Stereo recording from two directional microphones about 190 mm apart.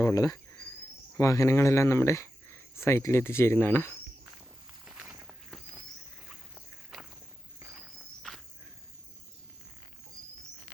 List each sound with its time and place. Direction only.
0.0 s speech: 15° left (ahead or behind)
4.9 s walk: 5° right (ahead or behind)